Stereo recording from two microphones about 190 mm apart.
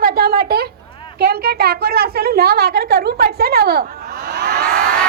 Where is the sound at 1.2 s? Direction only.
55° right (ahead or behind).